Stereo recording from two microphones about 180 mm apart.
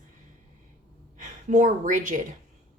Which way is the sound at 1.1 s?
45° right (ahead or behind).